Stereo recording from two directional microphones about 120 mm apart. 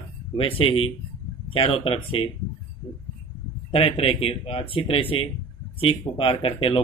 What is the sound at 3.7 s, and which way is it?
Speech, 50° left (ahead or behind).